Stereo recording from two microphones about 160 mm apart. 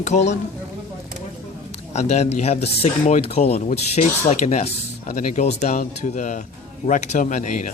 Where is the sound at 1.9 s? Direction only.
45° left (ahead or behind).